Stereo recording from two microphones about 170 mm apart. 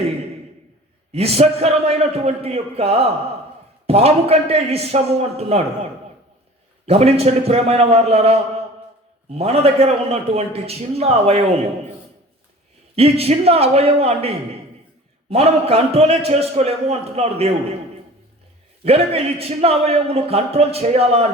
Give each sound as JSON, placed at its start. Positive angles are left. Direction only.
{"t": 1.1, "sound": "a man's voice", "side_deg": -35}
{"t": 6.8, "sound": "a man's voice", "side_deg": -35}
{"t": 13.0, "sound": "a man's voice", "side_deg": -35}
{"t": 18.9, "sound": "a man's voice", "side_deg": -35}